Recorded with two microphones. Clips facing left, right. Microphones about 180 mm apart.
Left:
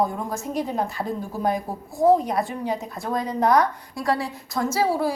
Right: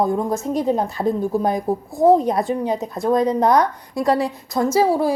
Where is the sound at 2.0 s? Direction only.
25° right (ahead or behind).